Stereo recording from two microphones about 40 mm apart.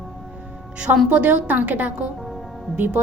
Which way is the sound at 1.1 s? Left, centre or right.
Right.